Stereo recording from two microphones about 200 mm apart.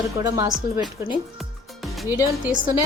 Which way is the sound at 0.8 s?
Centre (ahead or behind).